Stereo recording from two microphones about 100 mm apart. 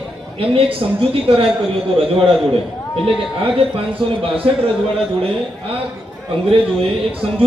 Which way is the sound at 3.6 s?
65° right (ahead or behind).